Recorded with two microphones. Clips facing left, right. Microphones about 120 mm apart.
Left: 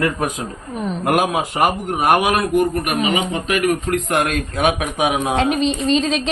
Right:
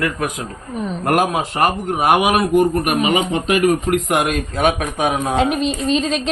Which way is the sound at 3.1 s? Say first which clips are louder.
Right 3 dB; 30° right (ahead or behind).